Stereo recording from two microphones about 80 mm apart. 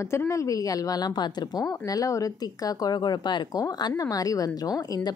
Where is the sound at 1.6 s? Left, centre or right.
Left.